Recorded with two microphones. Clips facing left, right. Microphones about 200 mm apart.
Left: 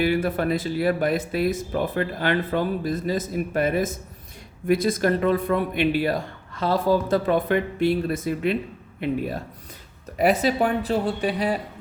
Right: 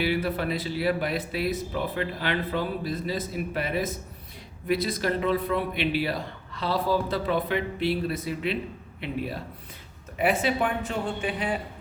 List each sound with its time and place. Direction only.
0.0 s a man's voice: 50° left (ahead or behind)